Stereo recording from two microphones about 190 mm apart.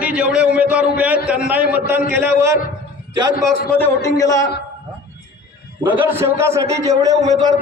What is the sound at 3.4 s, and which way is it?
A man's voice, 10° left (ahead or behind).